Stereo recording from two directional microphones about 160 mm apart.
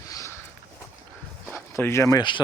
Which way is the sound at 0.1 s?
20° left (ahead or behind).